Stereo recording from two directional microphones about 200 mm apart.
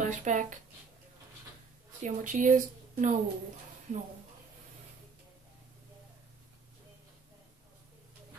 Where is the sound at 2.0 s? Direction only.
40° right (ahead or behind).